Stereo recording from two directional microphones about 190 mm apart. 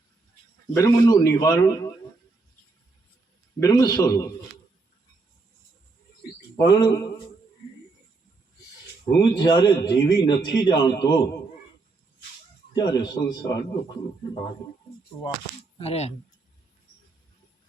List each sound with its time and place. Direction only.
0.7 s a man's voice: 15° left (ahead or behind)
3.6 s a man's voice: 20° left (ahead or behind)
6.6 s a man's voice: 20° left (ahead or behind)
9.2 s a man's voice: 25° left (ahead or behind)
12.7 s a man's voice: 20° left (ahead or behind)
15.8 s speech: 35° left (ahead or behind)